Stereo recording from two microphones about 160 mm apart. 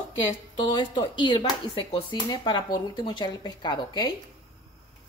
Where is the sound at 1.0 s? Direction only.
30° left (ahead or behind).